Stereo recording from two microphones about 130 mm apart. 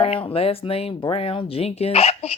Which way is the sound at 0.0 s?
45° left (ahead or behind).